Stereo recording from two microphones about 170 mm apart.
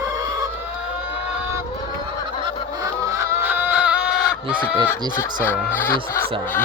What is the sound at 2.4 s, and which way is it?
Chicken, 20° right (ahead or behind).